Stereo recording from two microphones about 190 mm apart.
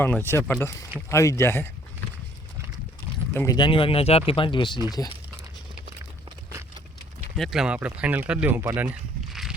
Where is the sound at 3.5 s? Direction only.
25° left (ahead or behind).